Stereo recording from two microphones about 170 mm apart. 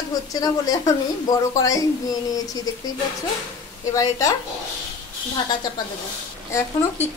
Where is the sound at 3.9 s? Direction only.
20° left (ahead or behind).